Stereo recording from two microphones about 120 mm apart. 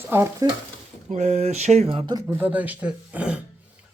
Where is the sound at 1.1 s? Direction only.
70° right (ahead or behind).